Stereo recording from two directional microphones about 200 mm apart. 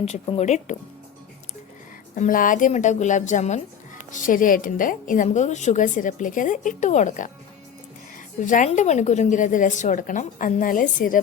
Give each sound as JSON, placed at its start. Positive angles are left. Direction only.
{"t": 0.0, "sound": "a woman's voice", "side_deg": 30}
{"t": 2.1, "sound": "a woman's voice", "side_deg": 40}
{"t": 8.4, "sound": "a woman's voice", "side_deg": 40}